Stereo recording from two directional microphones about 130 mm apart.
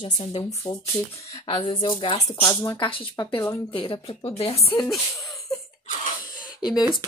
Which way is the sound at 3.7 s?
45° left (ahead or behind).